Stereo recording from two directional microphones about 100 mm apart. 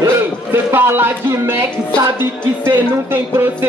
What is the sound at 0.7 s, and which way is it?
Speech, 20° right (ahead or behind).